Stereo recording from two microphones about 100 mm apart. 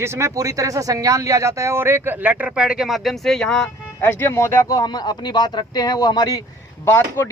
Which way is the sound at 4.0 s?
25° left (ahead or behind).